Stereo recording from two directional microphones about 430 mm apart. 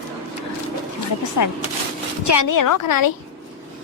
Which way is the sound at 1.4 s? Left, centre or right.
Left.